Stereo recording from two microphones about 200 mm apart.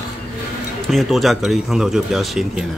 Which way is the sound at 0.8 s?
Centre (ahead or behind).